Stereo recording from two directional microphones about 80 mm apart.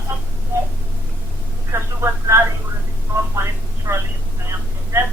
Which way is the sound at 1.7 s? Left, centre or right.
Right.